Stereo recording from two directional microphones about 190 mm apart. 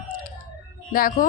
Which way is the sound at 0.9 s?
45° left (ahead or behind).